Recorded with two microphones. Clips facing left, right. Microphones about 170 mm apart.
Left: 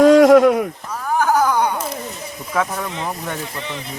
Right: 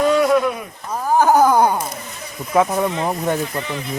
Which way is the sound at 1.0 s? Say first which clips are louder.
Right 4 dB; 40° right (ahead or behind).